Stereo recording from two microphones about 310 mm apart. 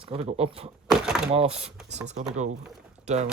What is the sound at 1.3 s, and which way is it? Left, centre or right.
Speech, centre.